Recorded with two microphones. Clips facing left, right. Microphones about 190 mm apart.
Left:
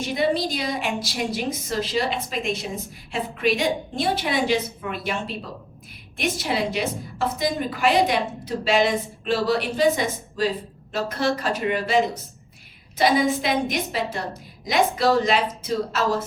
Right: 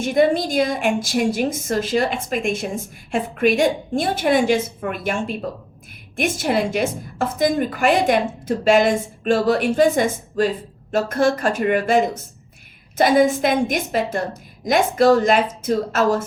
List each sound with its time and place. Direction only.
0.0 s a woman's voice: 50° right (ahead or behind)